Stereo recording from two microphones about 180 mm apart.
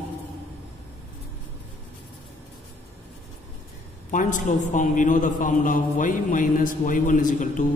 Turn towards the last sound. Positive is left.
turn(degrees=45)  # may be behind; listen again after turning